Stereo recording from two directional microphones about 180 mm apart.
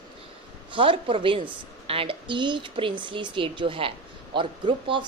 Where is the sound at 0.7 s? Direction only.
30° right (ahead or behind).